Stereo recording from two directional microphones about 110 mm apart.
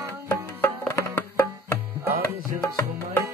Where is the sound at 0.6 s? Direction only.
20° left (ahead or behind).